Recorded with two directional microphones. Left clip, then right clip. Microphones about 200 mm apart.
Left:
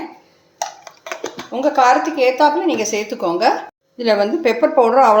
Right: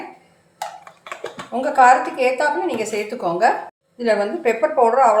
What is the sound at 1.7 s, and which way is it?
Speech, 45° left (ahead or behind).